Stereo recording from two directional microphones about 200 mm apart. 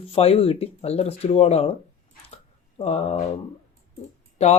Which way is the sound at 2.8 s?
35° left (ahead or behind).